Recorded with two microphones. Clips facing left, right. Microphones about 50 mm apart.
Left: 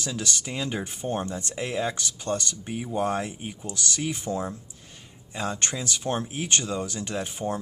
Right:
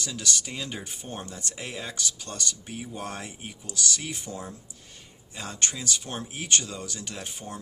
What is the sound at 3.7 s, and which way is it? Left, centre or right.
Speech, left.